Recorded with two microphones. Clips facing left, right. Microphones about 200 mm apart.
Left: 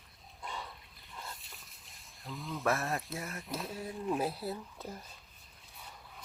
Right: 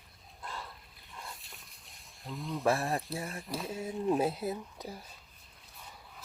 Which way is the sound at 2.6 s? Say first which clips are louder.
Right 3 dB; 30° right (ahead or behind).